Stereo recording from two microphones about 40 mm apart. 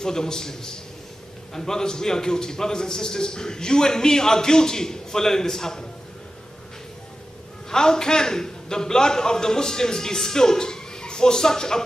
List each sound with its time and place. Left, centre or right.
0.0 s a man's voice: centre
7.7 s a man's voice: centre